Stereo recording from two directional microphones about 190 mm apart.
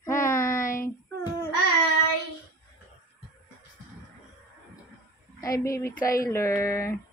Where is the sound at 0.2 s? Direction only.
15° left (ahead or behind).